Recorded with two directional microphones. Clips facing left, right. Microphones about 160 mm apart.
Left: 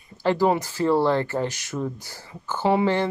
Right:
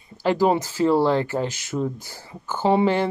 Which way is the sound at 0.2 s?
15° right (ahead or behind).